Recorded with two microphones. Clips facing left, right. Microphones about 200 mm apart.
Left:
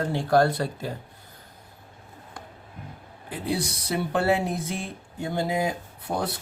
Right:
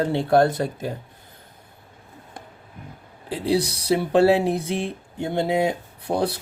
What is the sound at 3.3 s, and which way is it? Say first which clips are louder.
Speech: right 6 dB; 75° right (ahead or behind).